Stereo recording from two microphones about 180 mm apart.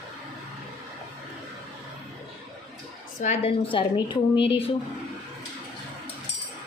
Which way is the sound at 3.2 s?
35° left (ahead or behind).